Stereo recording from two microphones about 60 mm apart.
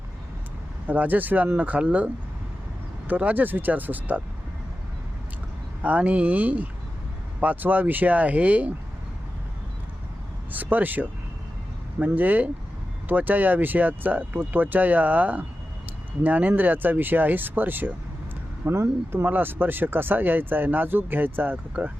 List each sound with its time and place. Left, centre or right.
0.9 s speech: right
3.1 s speech: right
5.8 s speech: right
10.5 s speech: right
18.7 s speech: right
19.2 s speech: right